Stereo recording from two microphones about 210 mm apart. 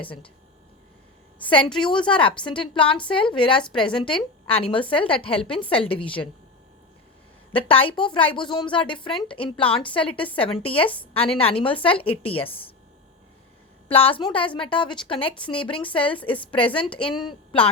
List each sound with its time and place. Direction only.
1.4 s speech: 25° left (ahead or behind)
5.4 s a woman's voice: 5° left (ahead or behind)
5.6 s speech: 25° left (ahead or behind)
7.5 s speech: 25° left (ahead or behind)
13.9 s speech: 25° left (ahead or behind)